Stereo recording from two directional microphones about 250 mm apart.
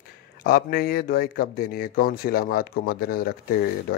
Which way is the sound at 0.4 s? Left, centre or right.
Left.